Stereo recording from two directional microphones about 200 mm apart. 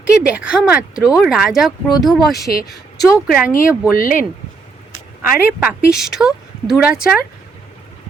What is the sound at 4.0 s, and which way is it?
Speech, 45° left (ahead or behind).